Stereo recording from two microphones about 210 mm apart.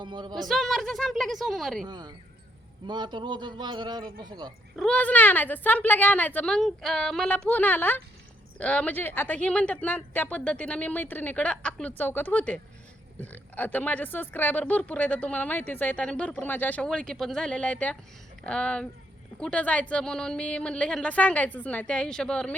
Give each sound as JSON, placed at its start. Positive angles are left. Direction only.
{"t": 0.0, "sound": "a man's voice", "side_deg": -20}
{"t": 0.3, "sound": "a woman's voice", "side_deg": 0}
{"t": 1.9, "sound": "a man's voice", "side_deg": -20}
{"t": 4.8, "sound": "a woman's voice", "side_deg": 5}